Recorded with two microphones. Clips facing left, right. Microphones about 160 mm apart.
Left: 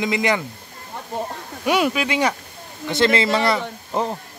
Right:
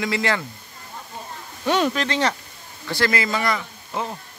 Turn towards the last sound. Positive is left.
turn(degrees=35)  # may be behind; listen again after turning